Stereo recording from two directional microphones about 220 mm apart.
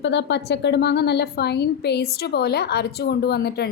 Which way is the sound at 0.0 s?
55° left (ahead or behind).